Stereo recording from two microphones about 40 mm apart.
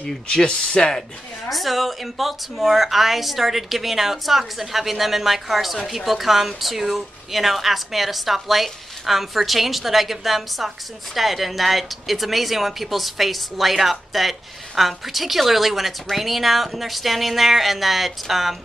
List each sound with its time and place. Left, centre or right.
0.3 s speech: left
1.5 s speech: centre